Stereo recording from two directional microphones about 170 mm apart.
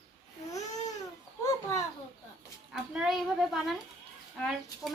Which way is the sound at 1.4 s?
15° left (ahead or behind).